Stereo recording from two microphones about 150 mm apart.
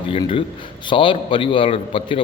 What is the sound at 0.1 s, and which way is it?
A man's voice, 35° left (ahead or behind).